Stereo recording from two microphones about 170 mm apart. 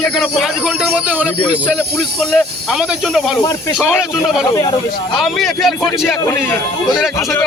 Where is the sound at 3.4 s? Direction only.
20° left (ahead or behind).